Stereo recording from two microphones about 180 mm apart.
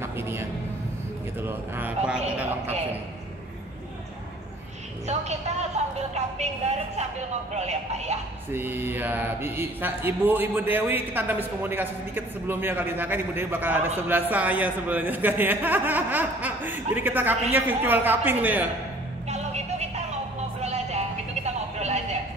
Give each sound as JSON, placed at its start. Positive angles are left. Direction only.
{"t": 0.0, "sound": "a sound", "side_deg": -15}
{"t": 1.4, "sound": "speech", "side_deg": -10}
{"t": 5.0, "sound": "speech", "side_deg": -40}
{"t": 8.5, "sound": "speech", "side_deg": -10}
{"t": 19.2, "sound": "music", "side_deg": -40}
{"t": 20.6, "sound": "music", "side_deg": -40}
{"t": 21.7, "sound": "a sound", "side_deg": -40}